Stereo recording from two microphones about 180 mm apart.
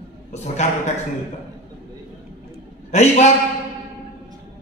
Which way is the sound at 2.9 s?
40° left (ahead or behind).